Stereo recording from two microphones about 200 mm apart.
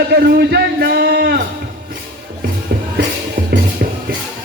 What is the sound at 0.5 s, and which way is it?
Music, 50° right (ahead or behind).